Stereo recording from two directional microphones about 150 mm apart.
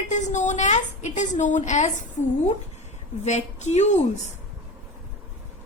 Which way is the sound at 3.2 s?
50° left (ahead or behind).